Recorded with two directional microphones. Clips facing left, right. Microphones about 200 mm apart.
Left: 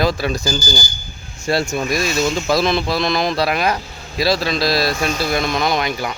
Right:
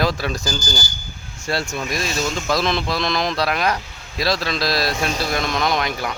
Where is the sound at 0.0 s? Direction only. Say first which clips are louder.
Left 3 dB; centre (ahead or behind).